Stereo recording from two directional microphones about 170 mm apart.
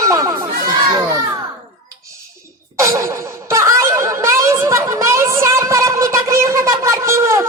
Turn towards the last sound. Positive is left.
turn(degrees=-15)  # may be behind; listen again after turning